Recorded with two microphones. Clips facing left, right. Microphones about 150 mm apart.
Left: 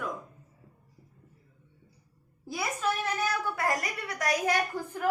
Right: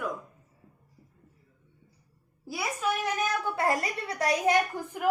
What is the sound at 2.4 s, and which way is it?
A woman's voice, 10° right (ahead or behind).